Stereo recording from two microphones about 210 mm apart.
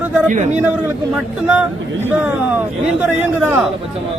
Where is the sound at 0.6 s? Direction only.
5° right (ahead or behind).